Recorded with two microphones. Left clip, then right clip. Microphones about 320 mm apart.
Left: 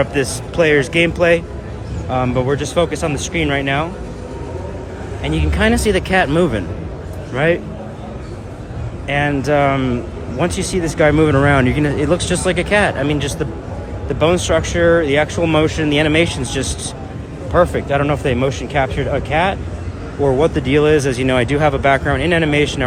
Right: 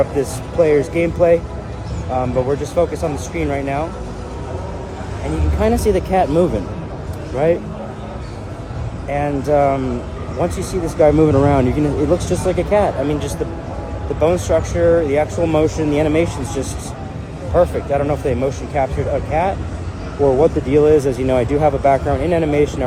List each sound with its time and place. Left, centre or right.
0.2 s speech: left
5.5 s speech: left
9.0 s speech: left